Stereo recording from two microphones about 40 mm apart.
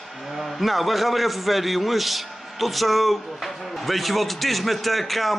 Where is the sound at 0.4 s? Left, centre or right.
Centre.